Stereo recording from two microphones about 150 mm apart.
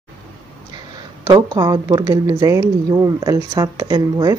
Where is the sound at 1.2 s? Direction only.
25° right (ahead or behind).